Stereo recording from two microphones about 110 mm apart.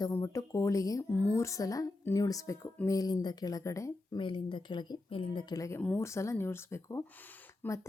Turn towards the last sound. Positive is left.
turn(degrees=25)  # may be behind; listen again after turning